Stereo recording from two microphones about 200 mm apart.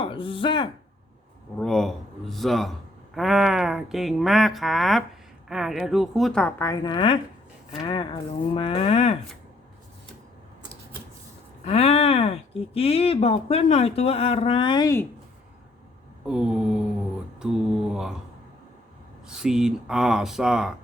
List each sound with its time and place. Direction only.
0.0 s speech: 25° left (ahead or behind)
1.5 s speech: 5° left (ahead or behind); by 9.1 s 30° left (ahead or behind)
11.6 s speech: 30° left (ahead or behind)
16.2 s speech: 5° right (ahead or behind)
17.9 s speech: 5° right (ahead or behind)
19.3 s speech: 5° right (ahead or behind)